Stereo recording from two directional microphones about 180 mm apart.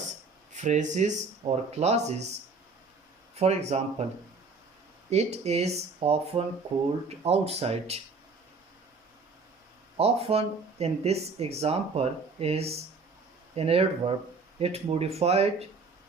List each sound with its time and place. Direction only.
0.5 s speech: 40° right (ahead or behind)
3.3 s speech: 35° right (ahead or behind)
5.1 s speech: 40° right (ahead or behind)
10.0 s speech: 35° right (ahead or behind)